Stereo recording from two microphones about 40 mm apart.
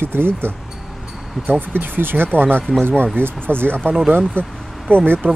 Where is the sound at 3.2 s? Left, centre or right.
Right.